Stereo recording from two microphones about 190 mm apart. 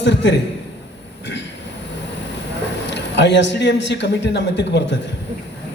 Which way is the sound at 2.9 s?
65° left (ahead or behind).